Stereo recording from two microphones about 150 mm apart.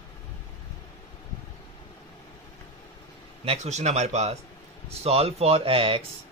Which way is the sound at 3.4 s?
50° right (ahead or behind).